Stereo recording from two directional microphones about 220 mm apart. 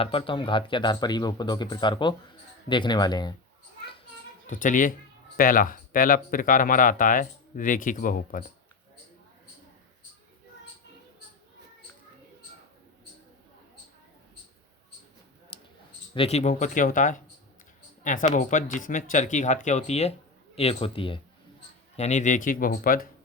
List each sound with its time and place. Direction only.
0.0 s speech: 25° left (ahead or behind)
4.4 s speech: 35° left (ahead or behind)
15.5 s clicking: 25° left (ahead or behind)
16.1 s speech: 25° left (ahead or behind)